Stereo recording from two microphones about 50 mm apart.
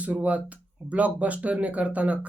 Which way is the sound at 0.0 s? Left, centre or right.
Right.